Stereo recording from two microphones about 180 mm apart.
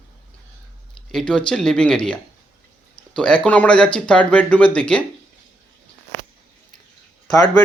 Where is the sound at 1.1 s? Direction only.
5° left (ahead or behind).